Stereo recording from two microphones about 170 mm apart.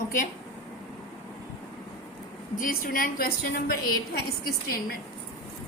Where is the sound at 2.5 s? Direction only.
55° left (ahead or behind).